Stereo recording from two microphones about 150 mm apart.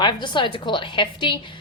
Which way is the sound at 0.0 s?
30° left (ahead or behind).